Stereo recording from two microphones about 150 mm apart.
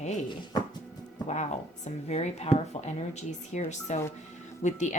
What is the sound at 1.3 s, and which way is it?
A woman's voice, 50° left (ahead or behind).